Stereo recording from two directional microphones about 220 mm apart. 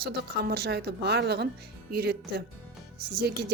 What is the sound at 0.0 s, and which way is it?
A woman's voice, 45° right (ahead or behind).